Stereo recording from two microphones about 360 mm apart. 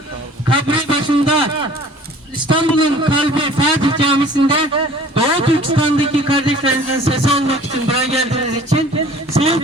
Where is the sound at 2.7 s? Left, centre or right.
Centre.